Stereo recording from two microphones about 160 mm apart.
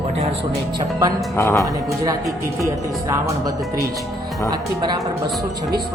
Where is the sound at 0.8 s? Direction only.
20° right (ahead or behind).